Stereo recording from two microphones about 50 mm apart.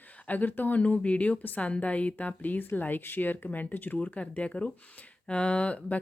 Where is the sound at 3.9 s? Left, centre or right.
Left.